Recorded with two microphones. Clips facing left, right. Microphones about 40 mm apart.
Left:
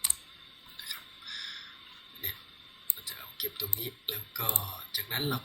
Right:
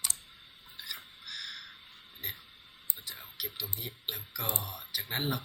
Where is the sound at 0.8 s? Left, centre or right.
Centre.